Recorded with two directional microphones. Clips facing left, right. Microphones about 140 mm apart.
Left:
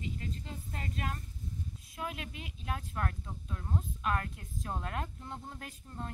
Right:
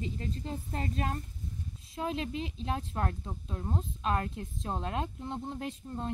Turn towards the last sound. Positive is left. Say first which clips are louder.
# right 8 dB
turn(degrees=-25)  # may be behind; listen again after turning